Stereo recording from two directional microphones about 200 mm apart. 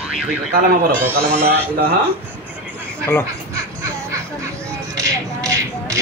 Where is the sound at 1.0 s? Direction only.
10° right (ahead or behind).